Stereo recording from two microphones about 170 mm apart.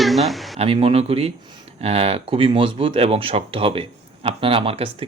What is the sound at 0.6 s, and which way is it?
Speech, 35° right (ahead or behind).